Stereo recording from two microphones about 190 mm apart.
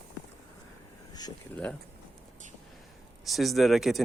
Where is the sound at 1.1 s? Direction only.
20° left (ahead or behind).